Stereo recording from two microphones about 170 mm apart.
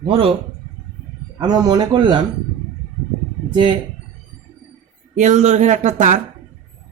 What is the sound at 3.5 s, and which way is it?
Speech, 30° right (ahead or behind).